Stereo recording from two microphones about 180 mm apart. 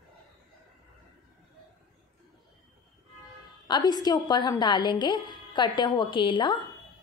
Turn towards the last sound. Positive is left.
turn(degrees=25)  # may be behind; listen again after turning